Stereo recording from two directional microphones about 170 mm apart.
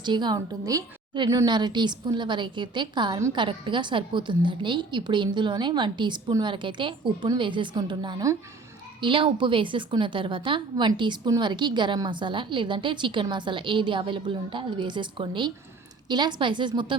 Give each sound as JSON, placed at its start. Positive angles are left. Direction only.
{"t": 0.0, "sound": "a woman's voice", "side_deg": -25}